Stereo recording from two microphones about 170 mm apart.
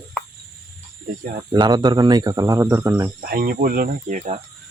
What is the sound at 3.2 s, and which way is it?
Speech, 60° right (ahead or behind).